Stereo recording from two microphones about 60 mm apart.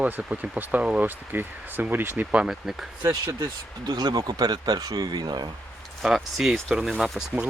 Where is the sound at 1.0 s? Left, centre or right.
Right.